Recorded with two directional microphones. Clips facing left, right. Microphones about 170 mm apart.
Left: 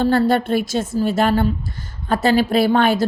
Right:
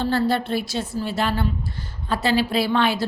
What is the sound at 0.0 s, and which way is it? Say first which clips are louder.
A woman's voice: left 5 dB; 50° left (ahead or behind).